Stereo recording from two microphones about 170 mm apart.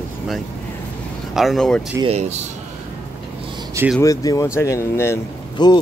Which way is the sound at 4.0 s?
20° left (ahead or behind).